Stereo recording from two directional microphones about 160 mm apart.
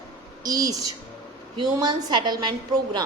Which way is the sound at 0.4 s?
25° right (ahead or behind).